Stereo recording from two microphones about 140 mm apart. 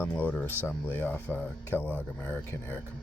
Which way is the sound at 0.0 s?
15° left (ahead or behind).